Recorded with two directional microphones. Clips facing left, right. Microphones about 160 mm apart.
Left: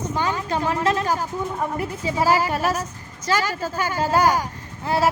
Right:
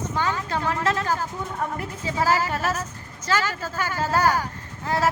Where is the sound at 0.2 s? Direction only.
15° left (ahead or behind).